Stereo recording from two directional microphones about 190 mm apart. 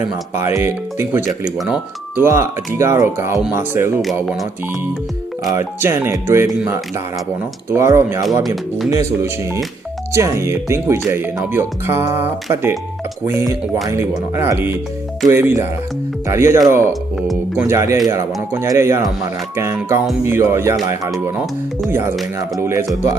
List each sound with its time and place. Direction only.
0.3 s speech: 10° right (ahead or behind)
5.5 s speech: 15° right (ahead or behind)
22.5 s speech: 15° right (ahead or behind)